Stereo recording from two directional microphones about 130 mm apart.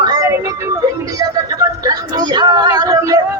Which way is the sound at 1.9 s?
30° right (ahead or behind).